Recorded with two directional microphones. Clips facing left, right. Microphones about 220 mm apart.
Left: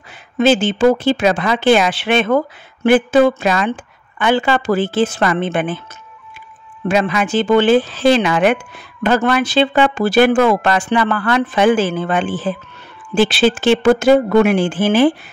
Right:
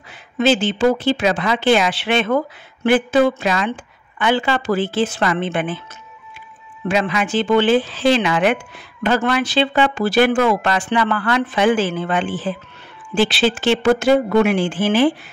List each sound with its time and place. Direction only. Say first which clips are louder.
0.4 s speech: left 3 dB; 50° left (ahead or behind)
6.9 s speech: left 3 dB; 45° left (ahead or behind)